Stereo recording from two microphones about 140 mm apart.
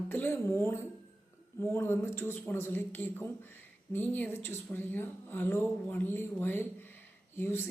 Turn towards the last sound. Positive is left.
turn(degrees=15)  # may be behind; listen again after turning